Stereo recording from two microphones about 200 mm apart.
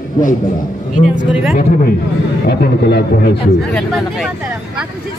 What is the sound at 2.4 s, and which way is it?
Speech, 55° left (ahead or behind).